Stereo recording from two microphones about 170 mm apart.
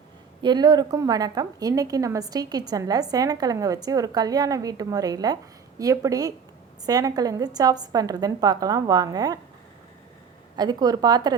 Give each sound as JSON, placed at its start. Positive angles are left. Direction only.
{"t": 0.4, "sound": "a woman's voice", "side_deg": -25}
{"t": 10.6, "sound": "a woman's voice", "side_deg": -25}